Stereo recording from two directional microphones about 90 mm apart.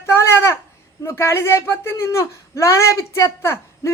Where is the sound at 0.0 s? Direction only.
30° left (ahead or behind).